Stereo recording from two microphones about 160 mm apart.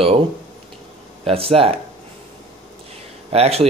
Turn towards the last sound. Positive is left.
turn(degrees=-40)  # may be behind; listen again after turning